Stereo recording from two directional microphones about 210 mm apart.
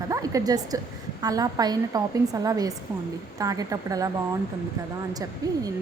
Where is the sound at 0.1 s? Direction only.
15° right (ahead or behind).